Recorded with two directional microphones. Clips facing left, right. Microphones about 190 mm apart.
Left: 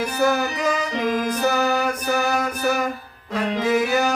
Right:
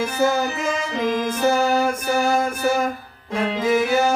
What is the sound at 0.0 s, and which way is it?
Speech, 25° right (ahead or behind).